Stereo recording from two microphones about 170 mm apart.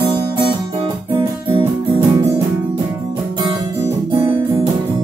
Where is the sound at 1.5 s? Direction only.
35° right (ahead or behind).